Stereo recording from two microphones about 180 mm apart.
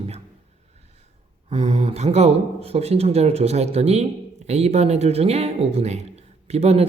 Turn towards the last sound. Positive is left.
turn(degrees=-35)  # may be behind; listen again after turning